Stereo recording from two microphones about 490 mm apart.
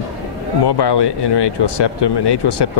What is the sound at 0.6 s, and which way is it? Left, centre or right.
Speech, left.